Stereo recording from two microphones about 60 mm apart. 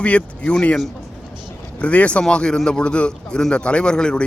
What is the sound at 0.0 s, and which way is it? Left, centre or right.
Speech, left.